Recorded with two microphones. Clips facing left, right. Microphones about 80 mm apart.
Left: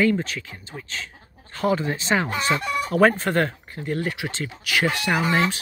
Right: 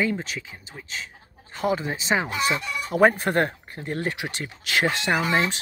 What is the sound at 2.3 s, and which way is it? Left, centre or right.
Chicken, left.